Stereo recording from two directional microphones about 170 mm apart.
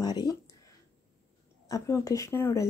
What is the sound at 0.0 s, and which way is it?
Speech, 25° left (ahead or behind).